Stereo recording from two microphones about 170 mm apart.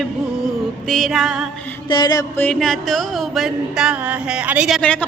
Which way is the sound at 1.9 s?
25° left (ahead or behind).